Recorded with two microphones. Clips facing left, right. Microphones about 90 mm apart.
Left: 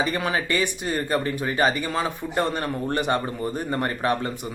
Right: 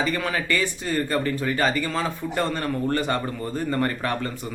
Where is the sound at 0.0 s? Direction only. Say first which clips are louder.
Left 1 dB; 20° left (ahead or behind).